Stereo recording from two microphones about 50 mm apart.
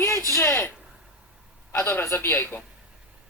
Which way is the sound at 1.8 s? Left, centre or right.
Left.